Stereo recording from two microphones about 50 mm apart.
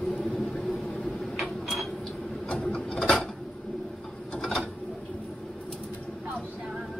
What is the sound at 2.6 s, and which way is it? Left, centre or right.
Mechanisms, centre.